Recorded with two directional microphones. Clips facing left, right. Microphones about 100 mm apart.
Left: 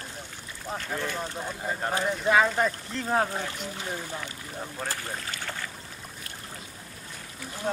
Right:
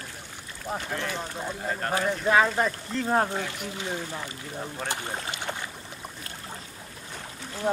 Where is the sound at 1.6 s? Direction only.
5° left (ahead or behind).